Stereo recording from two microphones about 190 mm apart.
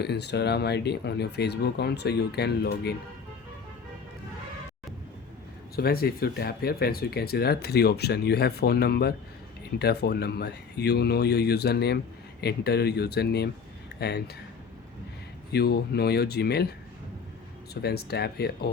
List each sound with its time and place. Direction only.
0.0 s speech: 60° left (ahead or behind)
5.7 s speech: 55° left (ahead or behind)
15.5 s speech: 55° left (ahead or behind)
17.8 s speech: 55° left (ahead or behind)